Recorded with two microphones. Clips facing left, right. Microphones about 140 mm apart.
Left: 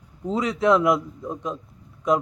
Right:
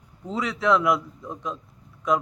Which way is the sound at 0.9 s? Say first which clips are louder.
Left 3 dB; 20° left (ahead or behind).